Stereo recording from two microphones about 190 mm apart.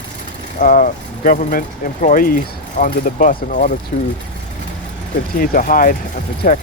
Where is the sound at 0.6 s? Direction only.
45° left (ahead or behind).